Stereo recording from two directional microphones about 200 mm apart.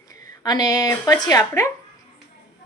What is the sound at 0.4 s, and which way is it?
A woman's voice, 20° left (ahead or behind).